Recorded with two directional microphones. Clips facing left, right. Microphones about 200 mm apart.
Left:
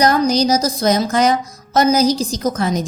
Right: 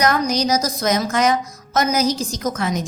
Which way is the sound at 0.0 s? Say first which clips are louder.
Left 4 dB; 35° left (ahead or behind).